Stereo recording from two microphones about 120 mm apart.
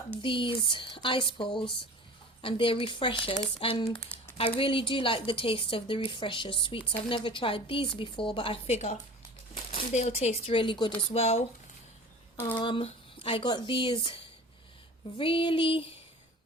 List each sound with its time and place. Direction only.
0.2 s a woman's voice: 45° left (ahead or behind)
8.7 s a woman's voice: 70° left (ahead or behind); by 11.0 s 40° left (ahead or behind)
11.1 s speech: 60° left (ahead or behind)
12.5 s a woman's voice: 45° left (ahead or behind)
15.2 s a woman's voice: 45° left (ahead or behind)